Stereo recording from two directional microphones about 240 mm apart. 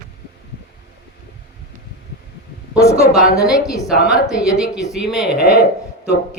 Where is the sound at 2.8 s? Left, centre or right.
Centre.